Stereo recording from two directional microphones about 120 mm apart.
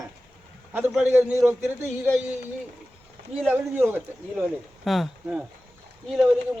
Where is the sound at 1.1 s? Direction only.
20° right (ahead or behind).